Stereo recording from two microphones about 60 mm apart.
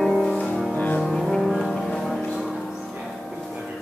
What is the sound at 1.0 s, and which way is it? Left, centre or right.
Music, centre.